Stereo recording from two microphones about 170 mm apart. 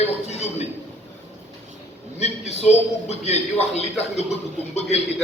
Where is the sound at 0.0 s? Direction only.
40° left (ahead or behind).